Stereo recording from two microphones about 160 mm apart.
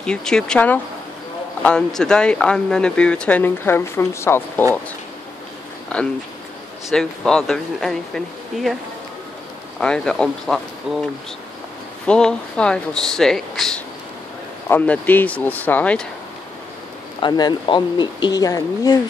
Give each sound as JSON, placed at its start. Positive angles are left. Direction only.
{"t": 0.0, "sound": "speech", "side_deg": 5}
{"t": 5.9, "sound": "speech", "side_deg": 5}
{"t": 9.8, "sound": "speech", "side_deg": 5}
{"t": 12.1, "sound": "speech", "side_deg": 5}
{"t": 17.2, "sound": "speech", "side_deg": 25}